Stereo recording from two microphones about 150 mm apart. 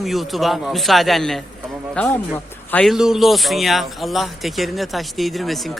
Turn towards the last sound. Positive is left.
turn(degrees=0)  # may be behind; listen again after turning